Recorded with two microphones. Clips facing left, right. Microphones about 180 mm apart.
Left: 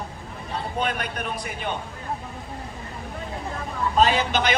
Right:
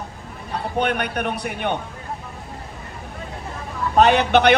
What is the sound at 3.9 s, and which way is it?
Speech, 65° right (ahead or behind).